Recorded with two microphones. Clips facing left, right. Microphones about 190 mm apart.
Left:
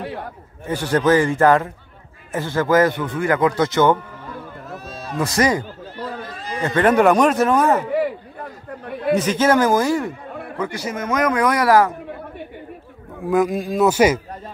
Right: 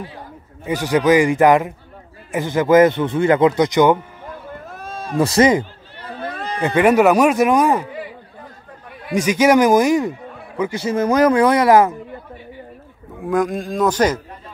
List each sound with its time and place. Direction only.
0.0 s a man's voice: 70° left (ahead or behind)
0.7 s speech: 10° right (ahead or behind)
4.7 s a sound: 50° right (ahead or behind)
5.2 s speech: 25° right (ahead or behind)
6.2 s a sound: 60° right (ahead or behind)
6.6 s speech: 15° right (ahead or behind)
7.8 s chatter: 65° left (ahead or behind)
9.1 s speech: 10° right (ahead or behind)
13.2 s a man's voice: 5° left (ahead or behind)